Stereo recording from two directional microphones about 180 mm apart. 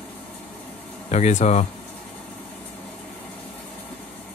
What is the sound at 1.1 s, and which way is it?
Speech, 40° left (ahead or behind).